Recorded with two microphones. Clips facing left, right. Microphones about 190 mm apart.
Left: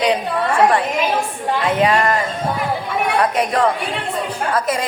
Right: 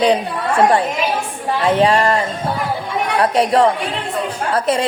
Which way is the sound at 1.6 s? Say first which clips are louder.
Right 3 dB; 30° right (ahead or behind).